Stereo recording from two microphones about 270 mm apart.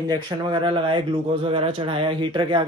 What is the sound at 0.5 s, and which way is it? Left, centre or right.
Speech, centre.